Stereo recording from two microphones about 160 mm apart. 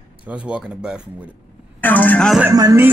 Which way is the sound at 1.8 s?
10° left (ahead or behind).